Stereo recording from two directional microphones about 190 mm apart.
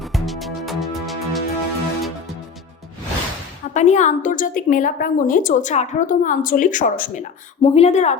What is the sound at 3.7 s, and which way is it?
A woman's voice, 40° left (ahead or behind).